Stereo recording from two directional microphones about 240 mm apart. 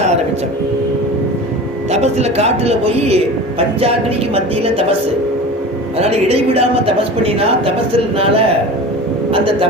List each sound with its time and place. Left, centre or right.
1.9 s a man's voice: right
6.0 s a man's voice: right